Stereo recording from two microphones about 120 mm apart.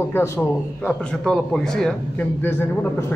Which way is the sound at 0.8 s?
10° left (ahead or behind).